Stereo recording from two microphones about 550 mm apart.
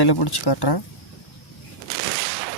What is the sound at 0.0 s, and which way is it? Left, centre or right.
Speech, left.